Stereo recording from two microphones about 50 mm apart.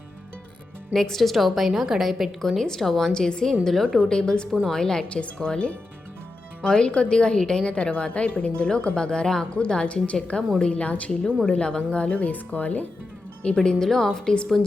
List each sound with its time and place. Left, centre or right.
0.9 s a woman's voice: centre
2.6 s a woman's voice: centre
3.1 s a woman's voice: centre
3.6 s a woman's voice: centre; by 11.1 s left
11.1 s a woman's voice: centre